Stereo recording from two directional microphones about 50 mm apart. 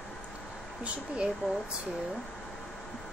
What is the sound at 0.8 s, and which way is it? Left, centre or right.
Speech, right.